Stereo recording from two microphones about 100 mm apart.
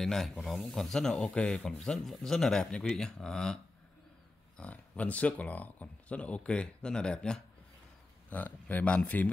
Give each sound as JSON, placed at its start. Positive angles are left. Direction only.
{"t": 0.0, "sound": "speech", "side_deg": 5}
{"t": 4.6, "sound": "speech", "side_deg": 15}